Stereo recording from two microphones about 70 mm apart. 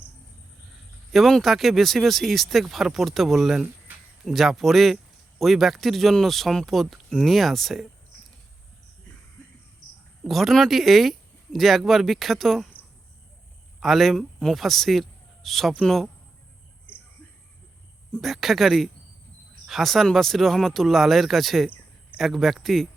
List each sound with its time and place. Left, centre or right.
1.1 s speech: centre
10.2 s speech: centre
13.7 s speech: centre
16.9 s mouse: left
18.2 s speech: centre